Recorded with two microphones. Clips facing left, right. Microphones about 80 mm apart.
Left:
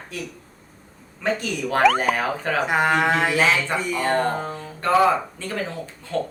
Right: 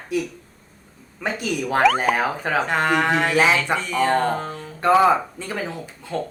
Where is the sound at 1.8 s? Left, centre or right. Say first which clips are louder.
Even; centre.